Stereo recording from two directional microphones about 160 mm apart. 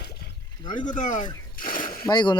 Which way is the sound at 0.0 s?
80° left.